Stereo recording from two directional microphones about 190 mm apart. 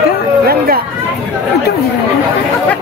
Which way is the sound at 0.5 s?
55° right (ahead or behind).